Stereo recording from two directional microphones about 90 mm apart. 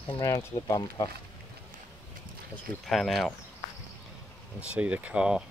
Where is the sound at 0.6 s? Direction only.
45° left (ahead or behind).